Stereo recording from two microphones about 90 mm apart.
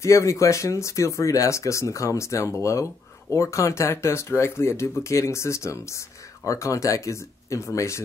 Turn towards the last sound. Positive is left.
turn(degrees=35)  # may be behind; listen again after turning